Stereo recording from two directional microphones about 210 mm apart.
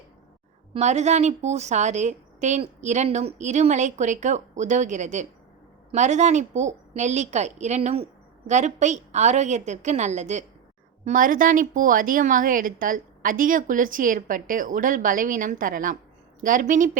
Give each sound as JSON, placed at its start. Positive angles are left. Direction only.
{"t": 0.7, "sound": "a woman's voice", "side_deg": -35}